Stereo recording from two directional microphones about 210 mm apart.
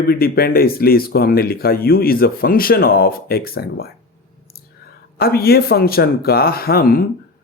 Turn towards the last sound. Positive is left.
turn(degrees=45)  # may be behind; listen again after turning